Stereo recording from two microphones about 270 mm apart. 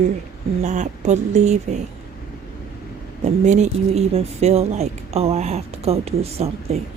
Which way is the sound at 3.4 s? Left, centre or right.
Right.